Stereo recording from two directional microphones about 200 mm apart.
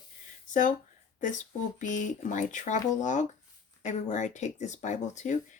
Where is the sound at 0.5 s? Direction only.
40° left (ahead or behind).